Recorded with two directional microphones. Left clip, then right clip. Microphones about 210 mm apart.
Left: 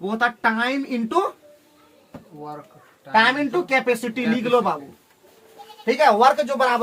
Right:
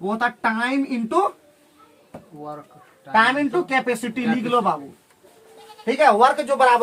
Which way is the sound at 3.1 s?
10° right (ahead or behind).